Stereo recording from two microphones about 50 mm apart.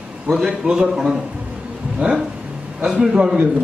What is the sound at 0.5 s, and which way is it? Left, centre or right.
A man's voice, centre.